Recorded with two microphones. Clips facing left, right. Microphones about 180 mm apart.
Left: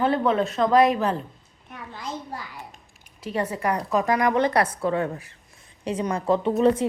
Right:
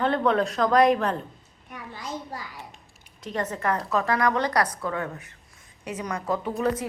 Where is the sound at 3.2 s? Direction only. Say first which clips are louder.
Left 2 dB; 10° left (ahead or behind).